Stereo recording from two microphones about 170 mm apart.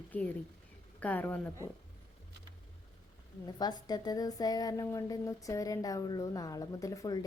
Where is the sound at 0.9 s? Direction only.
10° left (ahead or behind).